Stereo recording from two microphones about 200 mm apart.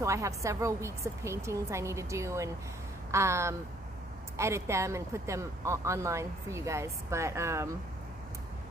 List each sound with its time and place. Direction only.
0.0 s speech: 15° right (ahead or behind)